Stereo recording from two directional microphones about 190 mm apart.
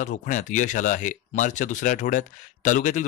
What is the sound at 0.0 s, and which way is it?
Speech, 45° left (ahead or behind).